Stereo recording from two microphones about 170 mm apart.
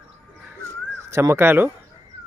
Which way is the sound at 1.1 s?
15° right (ahead or behind).